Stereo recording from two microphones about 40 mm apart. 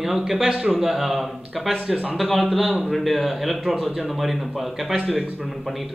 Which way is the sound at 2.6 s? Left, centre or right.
Right.